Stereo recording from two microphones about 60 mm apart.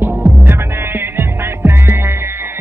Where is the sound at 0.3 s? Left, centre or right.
Right.